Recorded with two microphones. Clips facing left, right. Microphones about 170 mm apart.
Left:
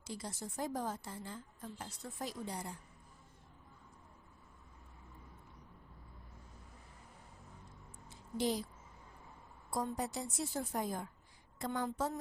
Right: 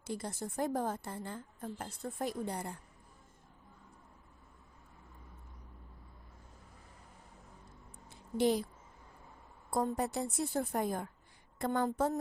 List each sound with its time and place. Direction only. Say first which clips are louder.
0.0 s a woman's voice: right 5 dB; 55° right (ahead or behind)
8.1 s a sound: right 6 dB; 60° right (ahead or behind)
9.6 s a woman's voice: right 5 dB; 55° right (ahead or behind)